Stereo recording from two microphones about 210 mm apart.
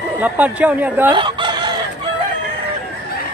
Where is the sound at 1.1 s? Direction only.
20° right (ahead or behind).